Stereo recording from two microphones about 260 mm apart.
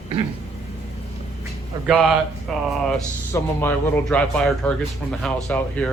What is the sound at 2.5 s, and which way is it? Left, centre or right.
A man's voice, centre.